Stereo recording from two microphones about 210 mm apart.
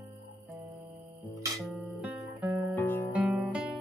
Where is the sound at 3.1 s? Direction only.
5° right (ahead or behind).